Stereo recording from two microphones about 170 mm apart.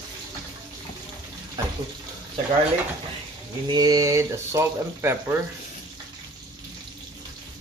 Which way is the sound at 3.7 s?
25° right (ahead or behind).